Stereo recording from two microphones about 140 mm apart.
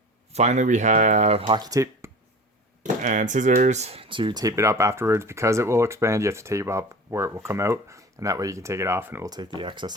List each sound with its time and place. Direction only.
0.3 s speech: 55° right (ahead or behind)
1.5 s speech: 30° right (ahead or behind)
2.8 s speech: 60° right (ahead or behind); by 9.3 s 15° right (ahead or behind)
9.3 s speech: 30° right (ahead or behind)